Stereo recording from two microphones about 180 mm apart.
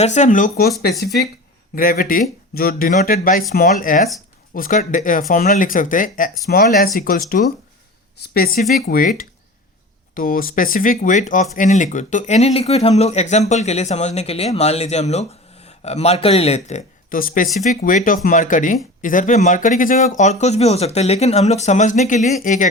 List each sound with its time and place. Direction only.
0.0 s speech: 40° left (ahead or behind)